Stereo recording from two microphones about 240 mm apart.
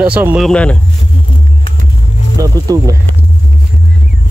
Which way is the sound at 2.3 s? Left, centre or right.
Centre.